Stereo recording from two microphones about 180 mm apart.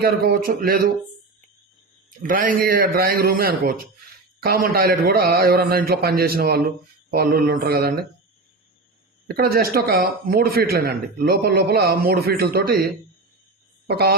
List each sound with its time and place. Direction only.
0.0 s speech: 60° right (ahead or behind)
2.2 s a man's voice: 50° right (ahead or behind)
9.2 s speech: 60° right (ahead or behind)
13.9 s speech: 60° right (ahead or behind)